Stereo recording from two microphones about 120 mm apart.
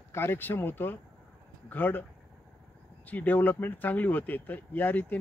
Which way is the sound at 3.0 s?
15° left (ahead or behind).